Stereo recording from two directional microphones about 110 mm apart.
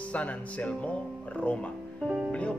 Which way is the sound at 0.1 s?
10° left (ahead or behind).